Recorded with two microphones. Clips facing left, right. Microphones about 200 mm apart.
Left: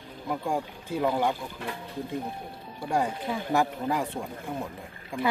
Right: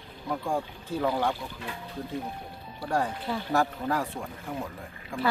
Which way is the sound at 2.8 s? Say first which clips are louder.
Left 1 dB; 15° left (ahead or behind).